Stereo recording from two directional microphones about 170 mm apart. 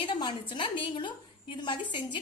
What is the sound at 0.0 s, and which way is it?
A woman's voice, 30° left (ahead or behind).